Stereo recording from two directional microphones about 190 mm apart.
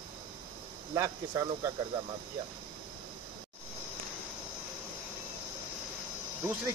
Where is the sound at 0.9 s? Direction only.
15° right (ahead or behind).